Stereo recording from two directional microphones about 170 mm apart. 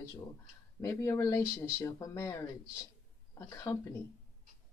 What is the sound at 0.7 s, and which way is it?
Speech, 15° left (ahead or behind).